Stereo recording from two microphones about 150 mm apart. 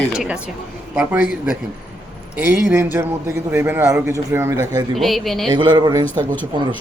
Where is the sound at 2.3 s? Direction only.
15° right (ahead or behind).